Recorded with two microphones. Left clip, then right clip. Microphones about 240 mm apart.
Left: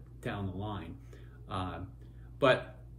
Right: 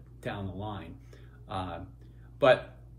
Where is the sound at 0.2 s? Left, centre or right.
Centre.